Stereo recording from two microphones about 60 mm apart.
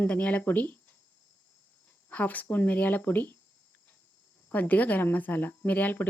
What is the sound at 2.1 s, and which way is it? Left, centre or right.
Speech, left.